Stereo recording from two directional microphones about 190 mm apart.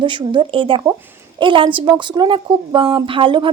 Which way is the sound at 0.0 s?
25° right (ahead or behind).